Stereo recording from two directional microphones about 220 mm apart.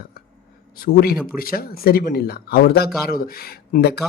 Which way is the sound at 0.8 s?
45° left (ahead or behind).